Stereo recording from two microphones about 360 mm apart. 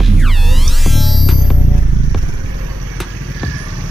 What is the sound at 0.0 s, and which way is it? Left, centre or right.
Music, centre.